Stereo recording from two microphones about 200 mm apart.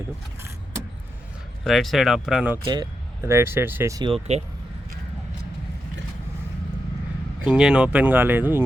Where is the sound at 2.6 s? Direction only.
20° right (ahead or behind).